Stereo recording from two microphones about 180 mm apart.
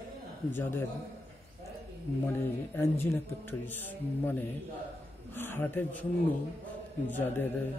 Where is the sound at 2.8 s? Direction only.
10° left (ahead or behind).